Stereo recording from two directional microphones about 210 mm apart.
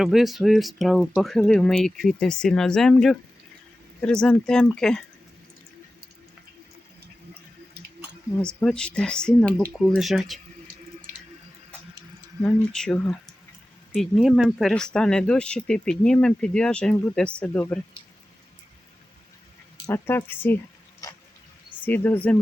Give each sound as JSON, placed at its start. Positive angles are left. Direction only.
{"t": 0.0, "sound": "speech", "side_deg": 0}
{"t": 7.8, "sound": "a sound", "side_deg": -50}
{"t": 8.4, "sound": "speech", "side_deg": 5}
{"t": 12.4, "sound": "speech", "side_deg": 5}
{"t": 19.9, "sound": "a woman's voice", "side_deg": 10}
{"t": 21.8, "sound": "speech", "side_deg": 10}